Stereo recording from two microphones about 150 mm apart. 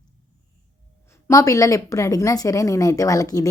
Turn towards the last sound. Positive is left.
turn(degrees=25)  # may be behind; listen again after turning